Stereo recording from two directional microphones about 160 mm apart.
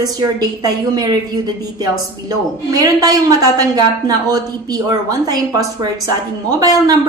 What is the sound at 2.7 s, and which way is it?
A woman's voice, 20° right (ahead or behind).